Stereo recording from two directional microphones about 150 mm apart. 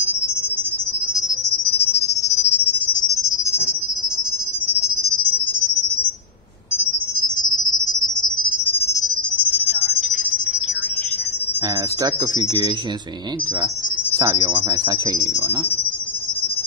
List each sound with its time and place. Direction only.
12.4 s speech: 30° right (ahead or behind)
14.1 s speech: 25° right (ahead or behind)